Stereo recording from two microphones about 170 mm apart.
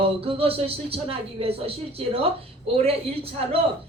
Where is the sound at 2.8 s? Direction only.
35° right (ahead or behind).